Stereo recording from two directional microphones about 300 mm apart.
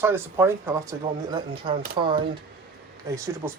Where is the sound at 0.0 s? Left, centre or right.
Centre.